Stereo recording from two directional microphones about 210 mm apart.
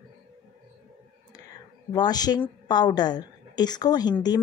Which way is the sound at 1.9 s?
20° left (ahead or behind).